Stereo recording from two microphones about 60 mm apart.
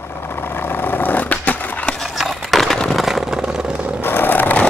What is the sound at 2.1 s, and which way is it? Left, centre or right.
Skateboard, centre.